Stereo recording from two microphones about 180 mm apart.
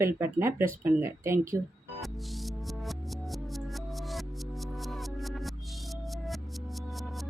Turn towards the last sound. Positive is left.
turn(degrees=0)  # may be behind; listen again after turning